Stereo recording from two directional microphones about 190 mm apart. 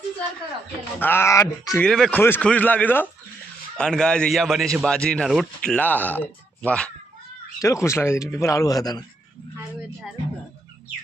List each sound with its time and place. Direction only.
0.9 s a man's voice: 10° left (ahead or behind)
1.8 s a man's voice: 5° left (ahead or behind); by 9.0 s 20° left (ahead or behind)